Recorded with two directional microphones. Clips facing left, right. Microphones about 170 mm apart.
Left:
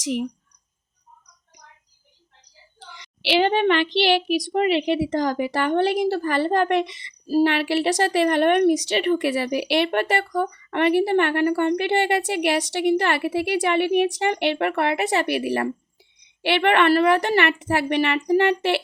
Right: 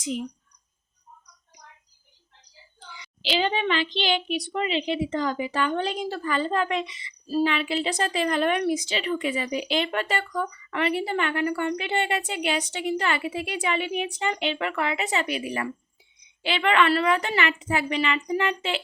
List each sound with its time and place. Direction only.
0.0 s speech: 75° left (ahead or behind)
3.2 s a woman's voice: 65° left (ahead or behind)
10.2 s speech: 35° left (ahead or behind)
10.7 s a woman's voice: 55° left (ahead or behind)
16.6 s a woman's voice: 60° left (ahead or behind)